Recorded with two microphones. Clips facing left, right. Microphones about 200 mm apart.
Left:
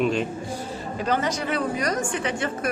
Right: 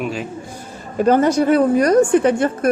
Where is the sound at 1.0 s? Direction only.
50° right (ahead or behind).